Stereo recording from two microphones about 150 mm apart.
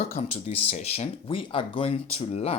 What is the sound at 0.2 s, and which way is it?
Speech, 40° left (ahead or behind).